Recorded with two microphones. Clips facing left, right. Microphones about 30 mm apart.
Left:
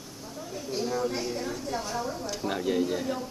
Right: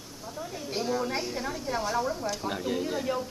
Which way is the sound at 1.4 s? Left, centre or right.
Centre.